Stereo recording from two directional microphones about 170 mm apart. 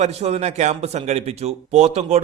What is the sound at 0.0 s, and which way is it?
A man's voice, 40° right (ahead or behind).